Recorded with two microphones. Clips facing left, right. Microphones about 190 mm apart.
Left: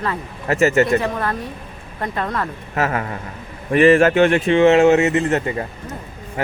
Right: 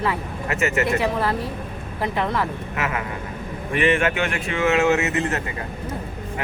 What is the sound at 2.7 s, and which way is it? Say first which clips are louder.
Speech: left 5 dB; 40° left (ahead or behind).